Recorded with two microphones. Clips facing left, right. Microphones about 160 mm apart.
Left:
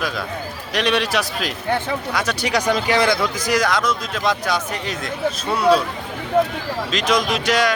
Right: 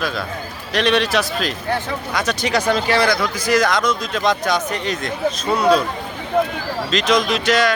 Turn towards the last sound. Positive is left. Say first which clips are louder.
# right 2 dB
turn(degrees=10)  # may be behind; listen again after turning